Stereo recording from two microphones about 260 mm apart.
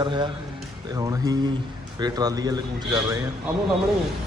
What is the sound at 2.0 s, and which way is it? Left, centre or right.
Speech, centre.